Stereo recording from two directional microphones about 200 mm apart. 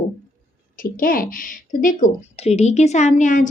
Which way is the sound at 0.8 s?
45° left (ahead or behind).